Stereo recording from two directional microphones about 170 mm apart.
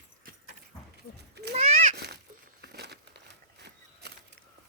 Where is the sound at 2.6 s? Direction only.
70° right (ahead or behind).